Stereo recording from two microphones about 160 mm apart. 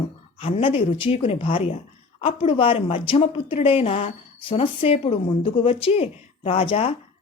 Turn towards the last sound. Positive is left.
turn(degrees=35)  # may be behind; listen again after turning